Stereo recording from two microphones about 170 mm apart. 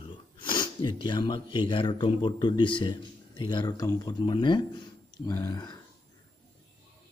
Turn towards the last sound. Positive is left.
turn(degrees=20)  # may be behind; listen again after turning